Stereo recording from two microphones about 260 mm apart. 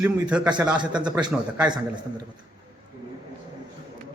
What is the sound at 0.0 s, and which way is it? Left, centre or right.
A man's voice, centre.